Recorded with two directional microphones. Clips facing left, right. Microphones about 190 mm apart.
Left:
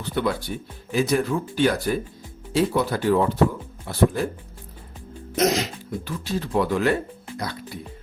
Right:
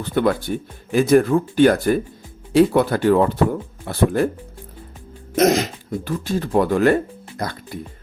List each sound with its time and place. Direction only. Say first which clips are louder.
0.0 s speech: right 6 dB; 50° right (ahead or behind)
5.4 s speech: right 5 dB; 55° right (ahead or behind)